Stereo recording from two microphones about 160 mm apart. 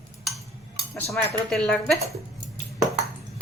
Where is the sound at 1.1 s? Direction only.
Centre (ahead or behind).